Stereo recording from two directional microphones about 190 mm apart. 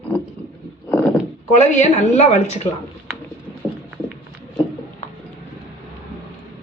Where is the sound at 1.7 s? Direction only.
35° left (ahead or behind).